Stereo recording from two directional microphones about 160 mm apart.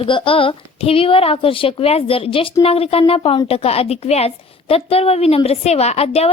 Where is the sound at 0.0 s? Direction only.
35° left (ahead or behind).